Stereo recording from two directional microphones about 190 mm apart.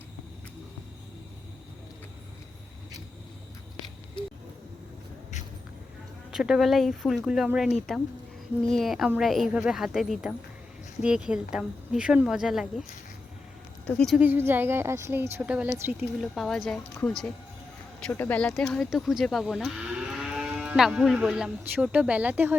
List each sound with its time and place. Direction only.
6.3 s speech: centre (ahead or behind)
13.8 s speech: 5° left (ahead or behind)
14.2 s a woman's voice: 10° right (ahead or behind)